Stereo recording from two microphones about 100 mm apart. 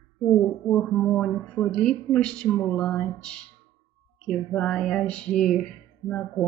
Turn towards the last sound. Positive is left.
turn(degrees=15)  # may be behind; listen again after turning